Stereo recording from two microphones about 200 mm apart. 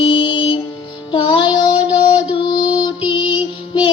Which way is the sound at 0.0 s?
25° left (ahead or behind).